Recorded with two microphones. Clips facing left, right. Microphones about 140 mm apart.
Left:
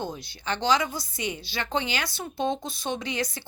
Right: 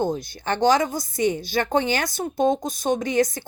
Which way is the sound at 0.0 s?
45° right (ahead or behind).